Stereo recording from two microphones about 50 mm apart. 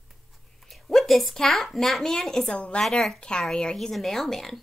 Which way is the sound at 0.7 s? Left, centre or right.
Centre.